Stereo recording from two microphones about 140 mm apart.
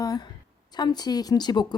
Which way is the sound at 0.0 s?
25° left (ahead or behind).